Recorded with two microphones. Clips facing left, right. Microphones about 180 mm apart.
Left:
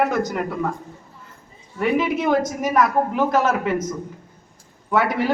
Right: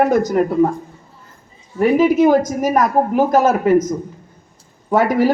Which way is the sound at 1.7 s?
40° right (ahead or behind).